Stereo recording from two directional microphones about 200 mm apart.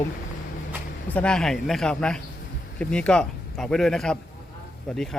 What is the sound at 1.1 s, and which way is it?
Speech, 5° left (ahead or behind).